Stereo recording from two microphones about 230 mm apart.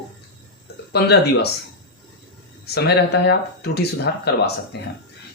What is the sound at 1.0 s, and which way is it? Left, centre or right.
Speech, left.